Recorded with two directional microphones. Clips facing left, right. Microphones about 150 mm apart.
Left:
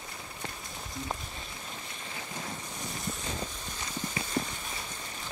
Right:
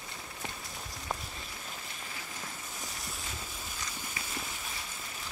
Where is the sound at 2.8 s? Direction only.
Centre (ahead or behind).